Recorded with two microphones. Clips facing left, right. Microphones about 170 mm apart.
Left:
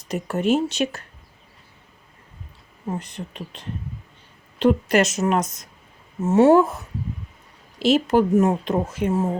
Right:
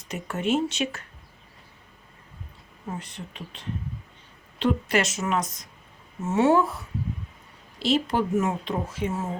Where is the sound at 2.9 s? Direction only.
40° left (ahead or behind).